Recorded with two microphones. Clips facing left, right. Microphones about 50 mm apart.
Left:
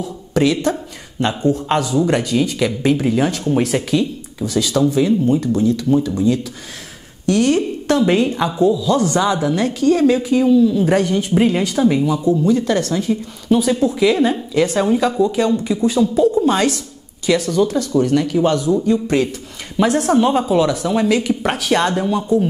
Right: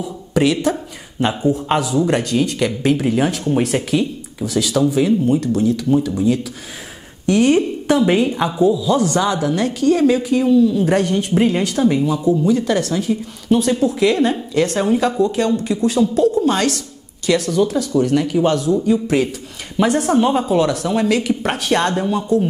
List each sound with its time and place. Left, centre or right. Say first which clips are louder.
0.0 s speech: even; centre
7.2 s speech: right 1 dB; centre
7.9 s a woman's voice: even; centre
9.1 s speech: left 1 dB; centre